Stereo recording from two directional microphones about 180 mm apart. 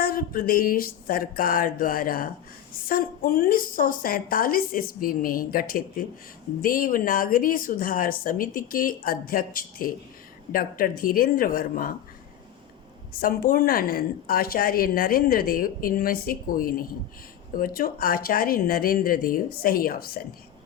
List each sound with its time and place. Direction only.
0.0 s a woman's voice: 55° left (ahead or behind)
13.1 s a woman's voice: 55° left (ahead or behind)